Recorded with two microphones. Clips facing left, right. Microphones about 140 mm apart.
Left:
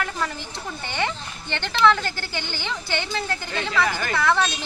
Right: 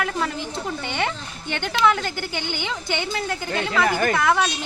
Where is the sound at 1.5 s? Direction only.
15° right (ahead or behind).